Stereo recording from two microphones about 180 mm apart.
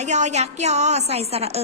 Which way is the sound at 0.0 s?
40° right (ahead or behind).